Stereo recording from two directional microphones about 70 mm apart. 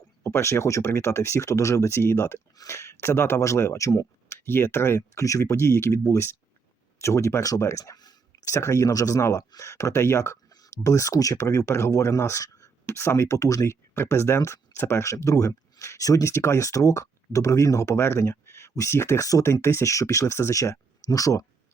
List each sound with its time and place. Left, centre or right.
0.2 s speech: left
4.4 s speech: left
7.9 s a sound: left
8.4 s speech: left
9.4 s speech: left
9.6 s speech: left